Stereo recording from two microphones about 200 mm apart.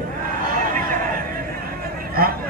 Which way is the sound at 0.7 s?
45° right (ahead or behind).